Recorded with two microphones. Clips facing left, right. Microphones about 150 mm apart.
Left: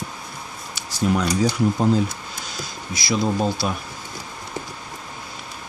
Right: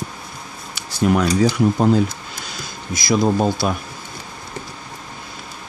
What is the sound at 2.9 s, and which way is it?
Speech, 45° right (ahead or behind).